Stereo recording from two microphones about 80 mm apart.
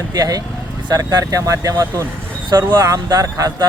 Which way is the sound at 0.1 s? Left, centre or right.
Right.